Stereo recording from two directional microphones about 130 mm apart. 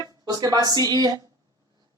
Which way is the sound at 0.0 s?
30° right (ahead or behind).